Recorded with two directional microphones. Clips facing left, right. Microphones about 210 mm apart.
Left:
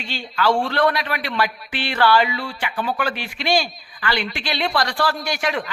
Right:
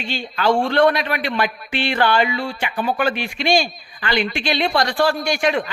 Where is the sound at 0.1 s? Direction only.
20° right (ahead or behind).